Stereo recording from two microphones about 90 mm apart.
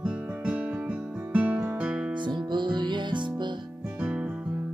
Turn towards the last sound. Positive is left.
turn(degrees=-10)  # may be behind; listen again after turning